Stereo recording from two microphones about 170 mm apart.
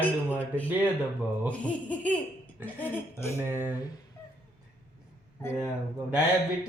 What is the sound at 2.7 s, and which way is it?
Speech, 15° left (ahead or behind).